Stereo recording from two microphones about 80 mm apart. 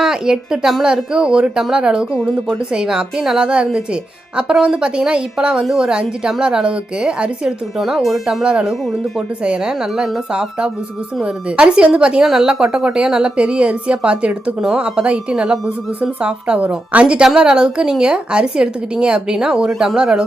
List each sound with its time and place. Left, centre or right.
0.0 s a woman's voice: centre